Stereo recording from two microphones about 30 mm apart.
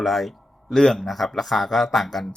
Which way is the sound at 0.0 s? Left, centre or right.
Centre.